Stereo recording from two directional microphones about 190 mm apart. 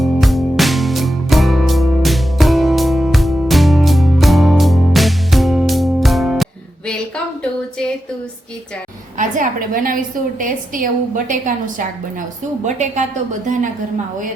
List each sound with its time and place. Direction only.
0.0 s music: centre (ahead or behind)
9.1 s a woman's voice: 45° right (ahead or behind)